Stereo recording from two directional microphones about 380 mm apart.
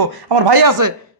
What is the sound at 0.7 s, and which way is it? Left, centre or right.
Speech, right.